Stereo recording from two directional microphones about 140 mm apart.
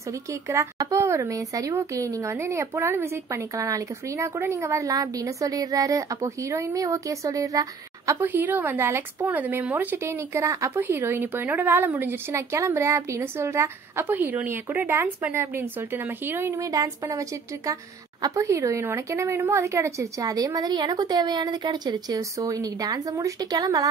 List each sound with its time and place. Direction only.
0.3 s a woman's voice: 20° right (ahead or behind)